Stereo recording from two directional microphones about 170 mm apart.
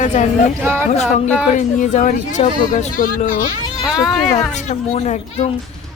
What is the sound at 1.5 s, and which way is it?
A woman's voice, 45° left (ahead or behind).